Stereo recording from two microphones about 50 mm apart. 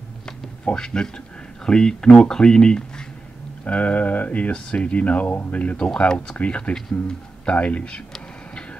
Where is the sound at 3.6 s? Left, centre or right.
Left.